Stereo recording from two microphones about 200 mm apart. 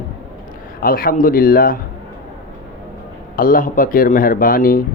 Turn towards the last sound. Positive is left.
turn(degrees=45)  # may be behind; listen again after turning